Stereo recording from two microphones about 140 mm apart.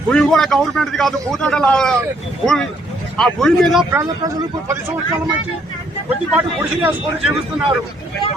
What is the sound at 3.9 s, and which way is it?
Speech, 25° right (ahead or behind).